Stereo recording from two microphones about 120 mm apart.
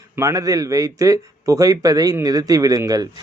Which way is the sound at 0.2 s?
25° right (ahead or behind).